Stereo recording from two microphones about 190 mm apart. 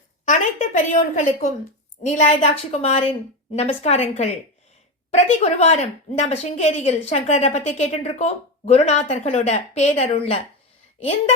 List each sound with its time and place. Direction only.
0.3 s a woman's voice: 40° left (ahead or behind)